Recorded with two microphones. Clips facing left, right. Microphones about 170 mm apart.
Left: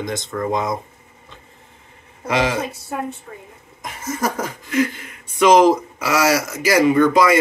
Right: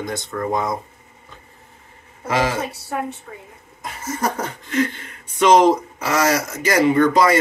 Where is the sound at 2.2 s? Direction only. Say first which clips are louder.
Left 1 dB; 20° left (ahead or behind).